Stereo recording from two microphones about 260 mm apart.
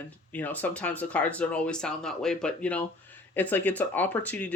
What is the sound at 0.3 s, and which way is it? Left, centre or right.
Speech, centre.